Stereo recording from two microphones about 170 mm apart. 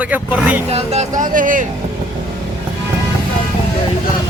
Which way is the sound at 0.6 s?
40° right (ahead or behind).